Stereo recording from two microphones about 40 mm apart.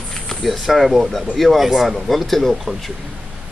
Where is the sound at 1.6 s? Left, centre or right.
Centre.